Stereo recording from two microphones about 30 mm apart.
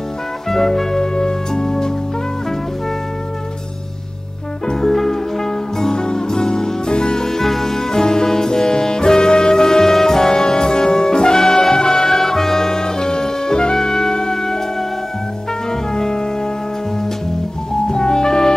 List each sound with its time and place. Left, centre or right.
0.5 s music: centre
4.7 s music: centre; by 7.2 s left
7.2 s music: centre
12.2 s music: centre
15.7 s music: left
17.8 s music: left